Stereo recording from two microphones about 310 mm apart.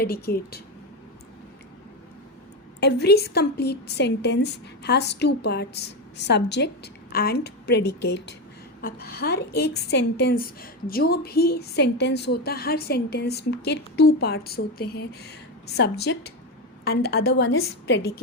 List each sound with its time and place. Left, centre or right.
0.0 s speech: left
2.8 s a woman's voice: left